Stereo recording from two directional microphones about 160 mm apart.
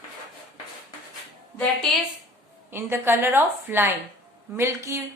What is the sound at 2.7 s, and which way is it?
A woman's voice, 15° right (ahead or behind).